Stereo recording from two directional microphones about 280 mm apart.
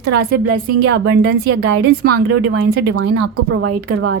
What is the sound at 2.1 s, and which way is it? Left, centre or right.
Speech, right.